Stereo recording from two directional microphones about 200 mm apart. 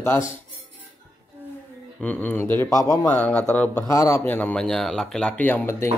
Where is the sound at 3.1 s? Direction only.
5° left (ahead or behind).